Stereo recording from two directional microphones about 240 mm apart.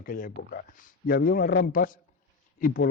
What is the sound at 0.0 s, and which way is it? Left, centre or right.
Speech, left.